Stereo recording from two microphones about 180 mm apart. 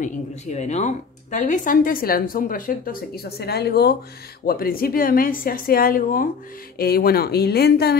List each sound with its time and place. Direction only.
0.0 s speech: 40° left (ahead or behind); by 8.0 s 60° left (ahead or behind)